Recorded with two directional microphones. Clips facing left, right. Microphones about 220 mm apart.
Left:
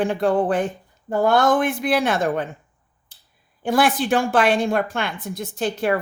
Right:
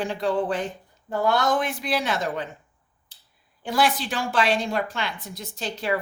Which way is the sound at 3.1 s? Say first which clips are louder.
Left 2 dB; 50° left (ahead or behind).